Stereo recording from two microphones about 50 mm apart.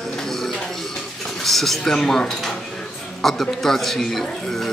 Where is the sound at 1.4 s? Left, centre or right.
Centre.